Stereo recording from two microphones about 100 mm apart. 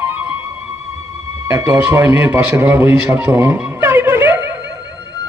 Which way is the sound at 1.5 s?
35° right (ahead or behind).